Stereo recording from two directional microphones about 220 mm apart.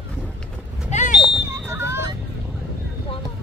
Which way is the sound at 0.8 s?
35° left (ahead or behind).